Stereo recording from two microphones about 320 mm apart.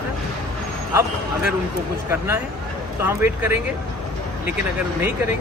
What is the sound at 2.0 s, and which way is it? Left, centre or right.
Speech, centre.